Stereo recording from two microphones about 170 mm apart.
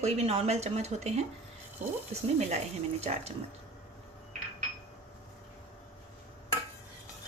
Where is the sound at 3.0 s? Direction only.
40° right (ahead or behind).